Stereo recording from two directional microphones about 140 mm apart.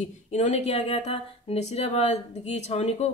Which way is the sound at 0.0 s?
55° left (ahead or behind).